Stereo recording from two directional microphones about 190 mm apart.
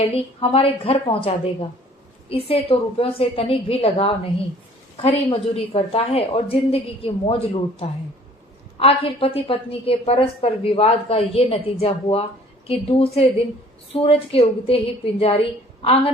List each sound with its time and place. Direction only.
0.1 s a woman's voice: 30° left (ahead or behind)
2.5 s a woman's voice: 30° left (ahead or behind)